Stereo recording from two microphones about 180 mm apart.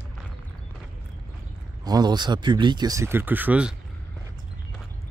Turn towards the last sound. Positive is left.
turn(degrees=-10)  # may be behind; listen again after turning